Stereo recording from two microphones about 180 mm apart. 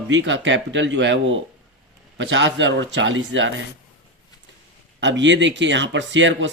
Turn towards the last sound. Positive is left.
turn(degrees=-90)